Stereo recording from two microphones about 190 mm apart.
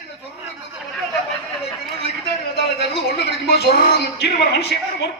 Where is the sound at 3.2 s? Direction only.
60° left (ahead or behind).